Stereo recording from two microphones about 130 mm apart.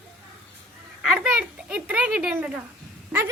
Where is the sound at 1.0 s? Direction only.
5° right (ahead or behind).